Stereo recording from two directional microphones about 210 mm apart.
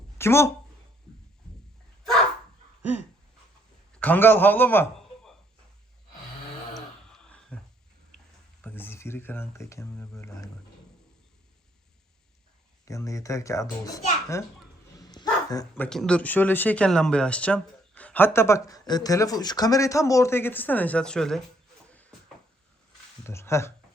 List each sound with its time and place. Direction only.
0.2 s speech: 10° left (ahead or behind)
3.9 s a man's voice: 10° left (ahead or behind)
6.7 s a sound: centre (ahead or behind)
8.6 s speech: 10° left (ahead or behind)
12.8 s speech: 15° left (ahead or behind)
14.9 s dog: 20° left (ahead or behind)
15.8 s speech: 5° left (ahead or behind)
21.8 s a sound: 5° left (ahead or behind)
23.2 s speech: 10° left (ahead or behind)